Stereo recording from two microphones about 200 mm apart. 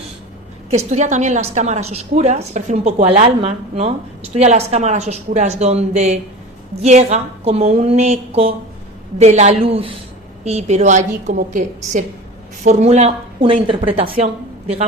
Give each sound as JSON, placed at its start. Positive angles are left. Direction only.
{"t": 0.9, "sound": "a woman's voice", "side_deg": -35}